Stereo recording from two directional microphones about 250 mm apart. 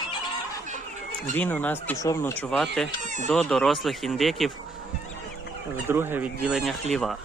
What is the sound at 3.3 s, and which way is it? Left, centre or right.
Speech, centre.